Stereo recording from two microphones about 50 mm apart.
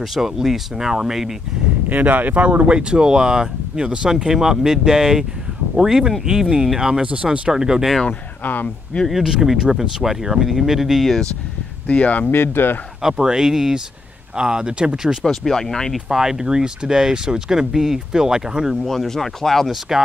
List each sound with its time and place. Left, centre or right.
0.0 s speech: centre
1.9 s speech: right; by 7.9 s centre
8.1 s speech: left
9.1 s speech: centre
11.9 s speech: left
12.3 s speech: left
13.0 s speech: centre
15.2 s speech: centre
16.1 s speech: centre
18.9 s speech: centre